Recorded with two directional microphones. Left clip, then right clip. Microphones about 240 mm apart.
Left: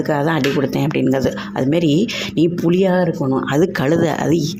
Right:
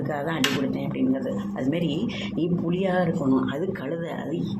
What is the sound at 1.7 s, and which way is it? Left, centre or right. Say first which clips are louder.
Speech: left 12 dB; left.